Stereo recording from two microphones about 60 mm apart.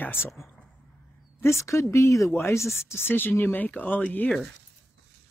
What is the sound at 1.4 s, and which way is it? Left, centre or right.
Speech, left.